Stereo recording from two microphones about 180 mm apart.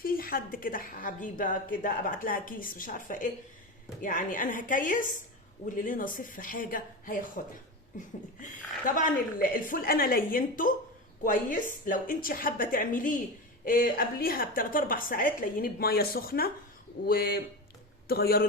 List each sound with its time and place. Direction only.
0.0 s a woman's voice: 55° left (ahead or behind)